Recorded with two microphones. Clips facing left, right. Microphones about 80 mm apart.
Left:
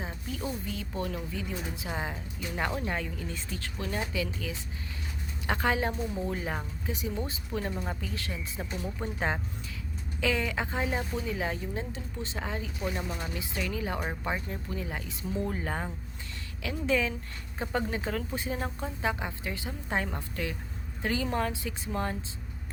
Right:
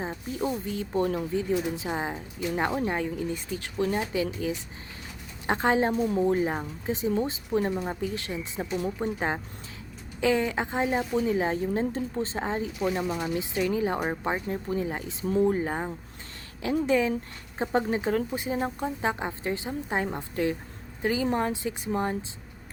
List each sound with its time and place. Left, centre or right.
0.0 s a woman's voice: right
21.0 s a woman's voice: centre
21.2 s speech: right